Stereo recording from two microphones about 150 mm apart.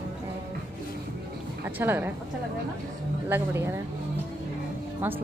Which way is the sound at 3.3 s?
15° right (ahead or behind).